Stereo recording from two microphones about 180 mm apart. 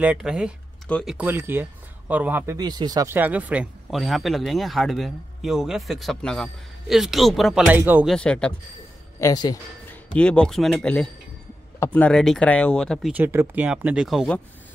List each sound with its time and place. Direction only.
0.0 s speech: 5° right (ahead or behind)
0.8 s speech: 5° left (ahead or behind)
1.1 s speech: 10° right (ahead or behind)
8.1 s speech: 5° left (ahead or behind)
9.2 s speech: 20° left (ahead or behind)
10.1 s speech: 5° left (ahead or behind)
13.1 s speech: 10° right (ahead or behind)